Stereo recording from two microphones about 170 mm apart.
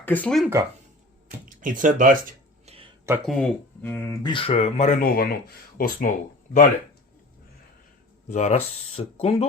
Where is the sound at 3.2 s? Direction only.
5° left (ahead or behind).